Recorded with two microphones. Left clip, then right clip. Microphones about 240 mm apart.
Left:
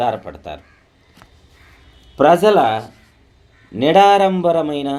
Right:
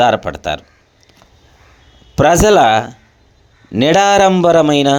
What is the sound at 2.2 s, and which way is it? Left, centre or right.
Speech, right.